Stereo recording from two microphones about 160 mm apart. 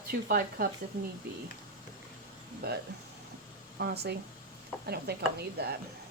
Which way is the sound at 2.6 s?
80° right.